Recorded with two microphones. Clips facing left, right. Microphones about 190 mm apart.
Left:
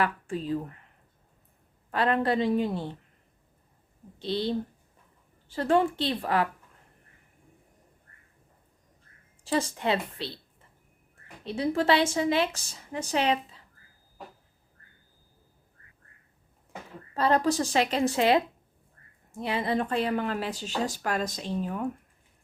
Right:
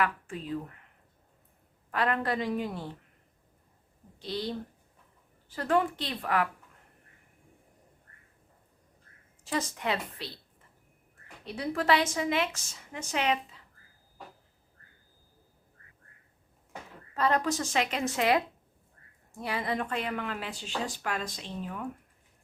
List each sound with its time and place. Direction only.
0.0 s speech: 30° left (ahead or behind)
1.9 s a woman's voice: 30° left (ahead or behind)
4.2 s a woman's voice: 25° left (ahead or behind)
9.4 s a woman's voice: 30° left (ahead or behind)
11.4 s speech: 25° left (ahead or behind)
17.2 s speech: 30° left (ahead or behind)